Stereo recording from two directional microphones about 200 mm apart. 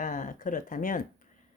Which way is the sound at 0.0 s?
40° left (ahead or behind).